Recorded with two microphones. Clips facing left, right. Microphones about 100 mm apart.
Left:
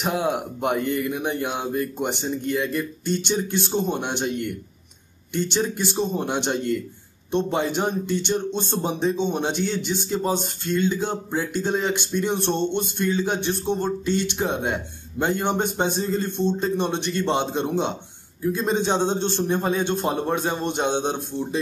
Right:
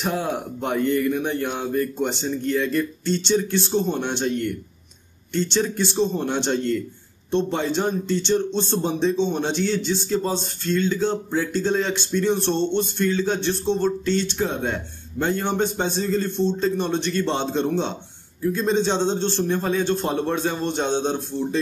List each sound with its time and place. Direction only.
0.0 s a man's voice: 15° left (ahead or behind)